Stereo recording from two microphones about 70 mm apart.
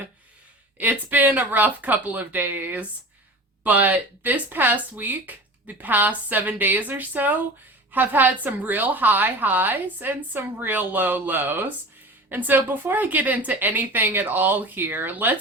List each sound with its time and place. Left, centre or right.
0.8 s a woman's voice: right